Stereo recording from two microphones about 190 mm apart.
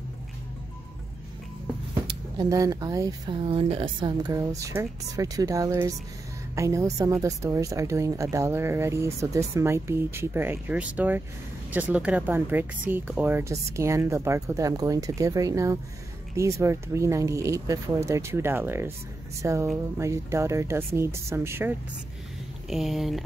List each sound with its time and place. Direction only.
2.0 s speech: 20° right (ahead or behind)
22.7 s speech: centre (ahead or behind)